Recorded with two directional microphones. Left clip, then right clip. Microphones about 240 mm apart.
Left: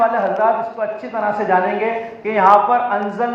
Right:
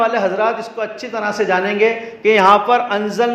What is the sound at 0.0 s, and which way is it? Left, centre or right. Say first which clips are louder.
Speech: even; right.